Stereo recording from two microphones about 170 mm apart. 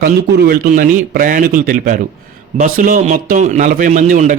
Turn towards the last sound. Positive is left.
turn(degrees=-45)  # may be behind; listen again after turning